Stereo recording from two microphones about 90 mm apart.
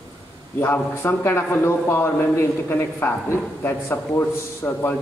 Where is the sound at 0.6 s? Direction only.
25° left (ahead or behind).